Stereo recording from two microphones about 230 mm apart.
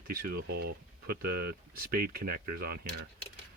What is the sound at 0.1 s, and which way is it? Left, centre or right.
Speech, right.